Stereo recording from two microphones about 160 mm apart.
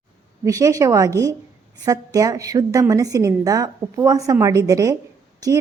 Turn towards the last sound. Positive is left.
turn(degrees=-25)  # may be behind; listen again after turning